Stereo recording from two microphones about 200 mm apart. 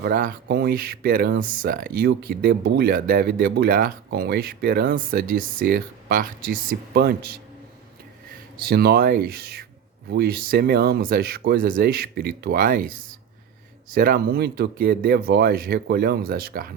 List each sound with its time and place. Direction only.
0.0 s speech: 45° right (ahead or behind)
8.6 s speech: 50° right (ahead or behind)
13.9 s speech: 50° right (ahead or behind)